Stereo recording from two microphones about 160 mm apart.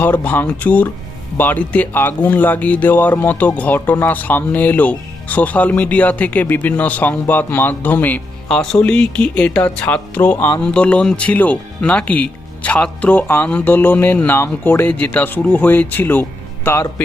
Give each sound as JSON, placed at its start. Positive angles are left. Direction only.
{"t": 0.0, "sound": "speech", "side_deg": 10}